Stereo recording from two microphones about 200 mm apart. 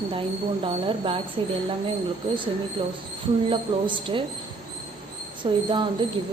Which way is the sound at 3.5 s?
25° right (ahead or behind).